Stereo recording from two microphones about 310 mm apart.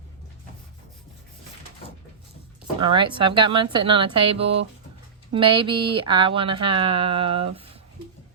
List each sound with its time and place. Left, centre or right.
2.9 s speech: centre